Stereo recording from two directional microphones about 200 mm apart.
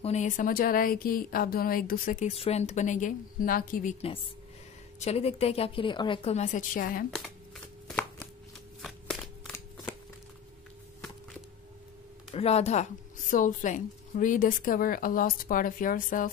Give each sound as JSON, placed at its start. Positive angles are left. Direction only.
{"t": 0.0, "sound": "a woman's voice", "side_deg": 35}
{"t": 4.9, "sound": "speech", "side_deg": 30}
{"t": 7.2, "sound": "chopping", "side_deg": 5}
{"t": 8.8, "sound": "a sound", "side_deg": 0}
{"t": 12.3, "sound": "a woman's voice", "side_deg": 30}